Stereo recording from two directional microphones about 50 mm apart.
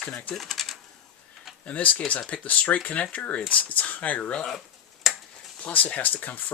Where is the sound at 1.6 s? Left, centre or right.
Left.